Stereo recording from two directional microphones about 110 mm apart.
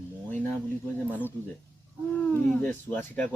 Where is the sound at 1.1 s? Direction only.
15° left (ahead or behind).